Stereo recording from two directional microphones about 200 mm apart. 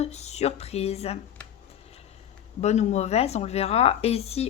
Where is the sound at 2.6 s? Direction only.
35° left (ahead or behind).